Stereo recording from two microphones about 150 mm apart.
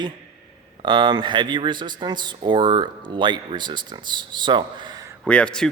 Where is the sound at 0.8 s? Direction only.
30° right (ahead or behind).